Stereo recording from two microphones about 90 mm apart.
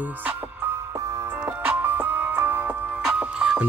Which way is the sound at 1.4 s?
25° right (ahead or behind).